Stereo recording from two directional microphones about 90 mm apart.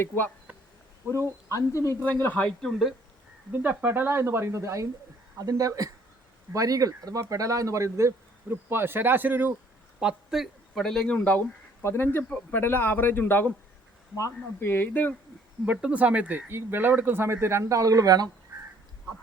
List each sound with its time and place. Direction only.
0.5 s insect: 15° right (ahead or behind)
1.5 s speech: 35° left (ahead or behind)
2.0 s a man's voice: 25° left (ahead or behind)
2.6 s speech: centre (ahead or behind)
3.6 s speech: 20° right (ahead or behind)
10.0 s speech: 5° right (ahead or behind); by 11.3 s 15° left (ahead or behind)
11.8 s a man's voice: 25° left (ahead or behind)
15.6 s speech: 15° right (ahead or behind); by 18.3 s 45° right (ahead or behind)